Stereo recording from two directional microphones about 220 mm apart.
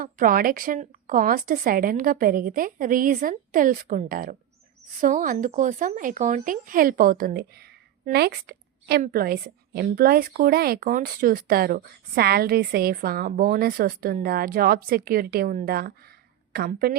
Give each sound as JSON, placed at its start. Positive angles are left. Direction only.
{"t": 0.0, "sound": "a woman's voice", "side_deg": -40}